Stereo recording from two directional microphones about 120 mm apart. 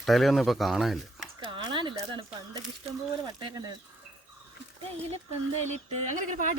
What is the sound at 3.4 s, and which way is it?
Speech, 40° right (ahead or behind).